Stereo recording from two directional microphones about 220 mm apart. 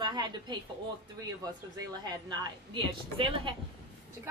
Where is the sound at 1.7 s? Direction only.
20° right (ahead or behind).